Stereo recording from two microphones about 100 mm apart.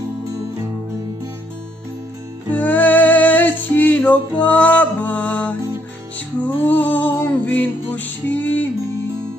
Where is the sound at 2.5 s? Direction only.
15° left (ahead or behind).